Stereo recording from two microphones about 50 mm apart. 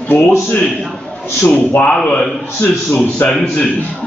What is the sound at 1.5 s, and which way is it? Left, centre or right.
Speech, left.